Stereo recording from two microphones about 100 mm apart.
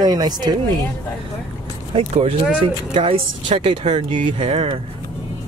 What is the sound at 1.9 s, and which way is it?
Speech, 85° right.